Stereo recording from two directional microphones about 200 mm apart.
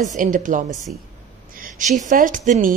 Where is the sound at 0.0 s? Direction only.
40° right (ahead or behind).